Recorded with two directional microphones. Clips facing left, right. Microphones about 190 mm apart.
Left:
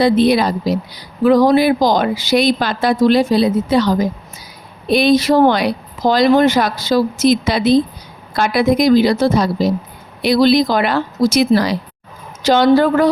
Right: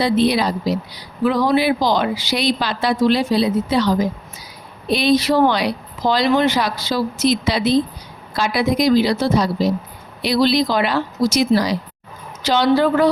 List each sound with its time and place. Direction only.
0.0 s speech: 50° left (ahead or behind)
12.4 s speech: 45° left (ahead or behind)